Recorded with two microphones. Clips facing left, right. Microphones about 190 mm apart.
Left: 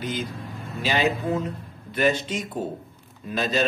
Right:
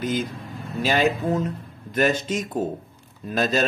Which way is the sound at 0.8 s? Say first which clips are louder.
Right 2 dB; 45° right (ahead or behind).